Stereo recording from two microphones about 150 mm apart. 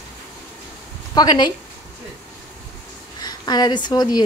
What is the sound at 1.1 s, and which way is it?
Speech, 30° left (ahead or behind).